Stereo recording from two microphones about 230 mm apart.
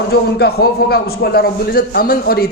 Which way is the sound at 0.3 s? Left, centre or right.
Left.